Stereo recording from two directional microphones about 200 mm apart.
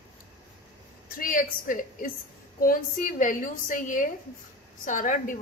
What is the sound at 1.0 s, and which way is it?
A woman's voice, 45° left (ahead or behind).